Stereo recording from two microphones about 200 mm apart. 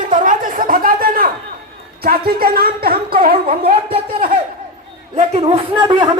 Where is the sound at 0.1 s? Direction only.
40° right (ahead or behind).